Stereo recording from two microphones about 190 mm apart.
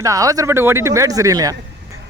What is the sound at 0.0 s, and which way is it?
Speech, 15° right (ahead or behind).